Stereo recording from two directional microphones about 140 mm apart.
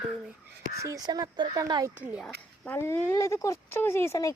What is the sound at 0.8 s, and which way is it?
Speech, 25° right (ahead or behind).